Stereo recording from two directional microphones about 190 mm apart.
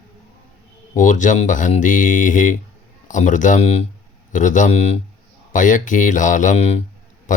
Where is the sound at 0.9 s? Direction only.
40° left (ahead or behind).